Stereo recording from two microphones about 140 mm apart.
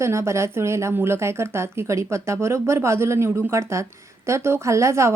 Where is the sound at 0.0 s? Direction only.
20° right (ahead or behind).